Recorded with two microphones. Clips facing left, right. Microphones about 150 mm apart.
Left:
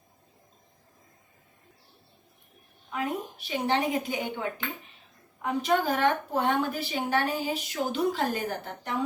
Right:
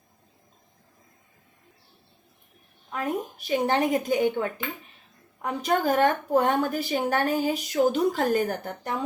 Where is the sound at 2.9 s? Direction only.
45° right (ahead or behind).